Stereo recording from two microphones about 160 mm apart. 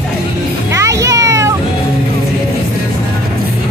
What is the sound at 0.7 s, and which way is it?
Music, 20° right (ahead or behind).